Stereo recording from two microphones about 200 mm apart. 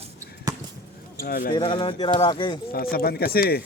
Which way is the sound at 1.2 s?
45° left (ahead or behind).